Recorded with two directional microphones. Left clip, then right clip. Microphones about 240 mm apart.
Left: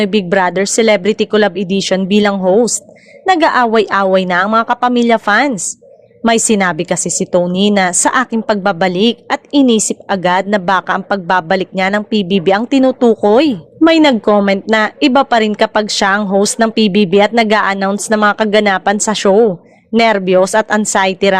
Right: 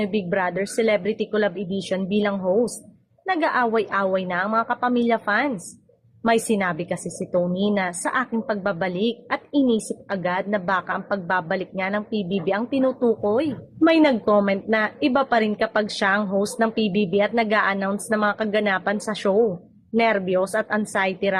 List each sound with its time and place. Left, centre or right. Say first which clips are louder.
0.0 s a woman's voice: left 11 dB; left